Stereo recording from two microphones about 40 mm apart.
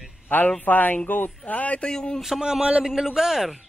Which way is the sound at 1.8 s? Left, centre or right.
Left.